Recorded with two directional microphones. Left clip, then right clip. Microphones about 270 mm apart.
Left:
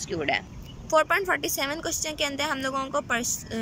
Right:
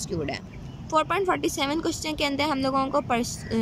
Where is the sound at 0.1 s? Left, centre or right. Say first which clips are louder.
Left 6 dB; centre.